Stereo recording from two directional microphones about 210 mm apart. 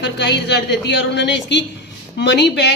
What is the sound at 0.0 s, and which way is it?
A woman's voice, 55° left (ahead or behind).